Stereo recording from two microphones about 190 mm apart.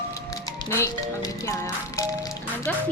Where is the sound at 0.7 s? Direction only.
15° left (ahead or behind).